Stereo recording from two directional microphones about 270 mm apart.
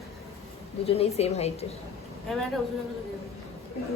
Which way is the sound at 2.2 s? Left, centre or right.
Centre.